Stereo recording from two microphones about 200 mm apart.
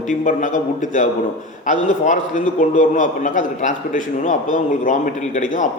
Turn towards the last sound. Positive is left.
turn(degrees=40)  # may be behind; listen again after turning